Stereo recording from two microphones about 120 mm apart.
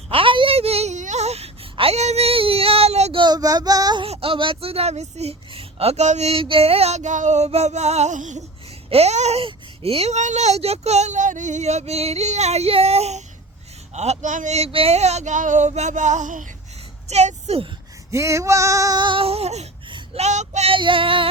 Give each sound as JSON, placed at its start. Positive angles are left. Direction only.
{"t": 0.1, "sound": "a sound", "side_deg": -45}
{"t": 1.7, "sound": "speech", "side_deg": -55}
{"t": 3.2, "sound": "child singing", "side_deg": -35}
{"t": 4.0, "sound": "speech", "side_deg": -50}
{"t": 8.9, "sound": "speech", "side_deg": -60}
{"t": 17.1, "sound": "speech", "side_deg": -65}
{"t": 18.1, "sound": "female singing", "side_deg": -25}
{"t": 20.1, "sound": "speech", "side_deg": -70}
{"t": 20.7, "sound": "speech", "side_deg": -45}